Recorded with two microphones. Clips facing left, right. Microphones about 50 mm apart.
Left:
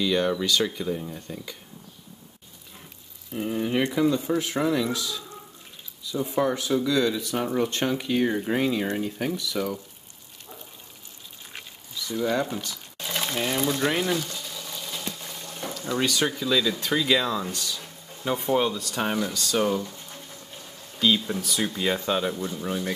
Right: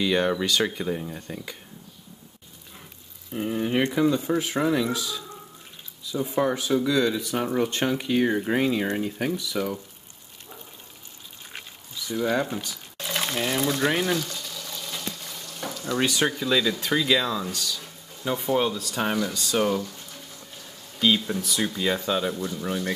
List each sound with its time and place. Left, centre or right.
0.0 s speech: right
3.3 s speech: centre
12.1 s speech: centre
13.1 s a sound: centre
13.4 s speech: centre
14.1 s frying: centre
15.0 s water: centre
15.7 s a sound: centre
16.0 s speech: centre
21.3 s speech: centre